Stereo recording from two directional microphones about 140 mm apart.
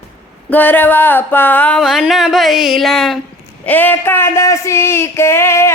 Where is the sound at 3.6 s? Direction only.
15° left (ahead or behind).